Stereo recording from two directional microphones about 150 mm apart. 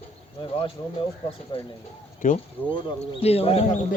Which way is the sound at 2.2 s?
60° left (ahead or behind).